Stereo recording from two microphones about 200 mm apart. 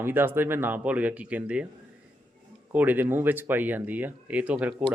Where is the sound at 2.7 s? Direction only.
10° right (ahead or behind).